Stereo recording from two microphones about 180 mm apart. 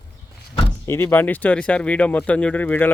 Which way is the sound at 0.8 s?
15° left (ahead or behind).